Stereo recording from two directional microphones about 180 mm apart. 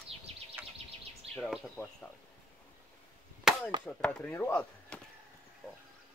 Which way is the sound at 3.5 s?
Centre (ahead or behind).